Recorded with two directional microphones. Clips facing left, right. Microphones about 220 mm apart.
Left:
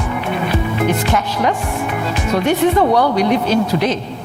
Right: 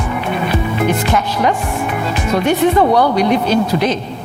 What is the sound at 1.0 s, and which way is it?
Speech, 20° right (ahead or behind).